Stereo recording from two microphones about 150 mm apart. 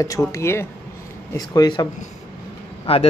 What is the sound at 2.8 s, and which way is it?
Speech, 40° left (ahead or behind).